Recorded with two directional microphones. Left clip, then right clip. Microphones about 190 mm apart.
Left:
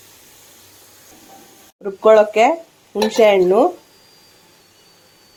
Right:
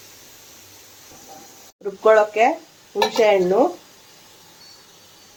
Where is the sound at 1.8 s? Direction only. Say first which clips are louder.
Left 4 dB; 30° left (ahead or behind).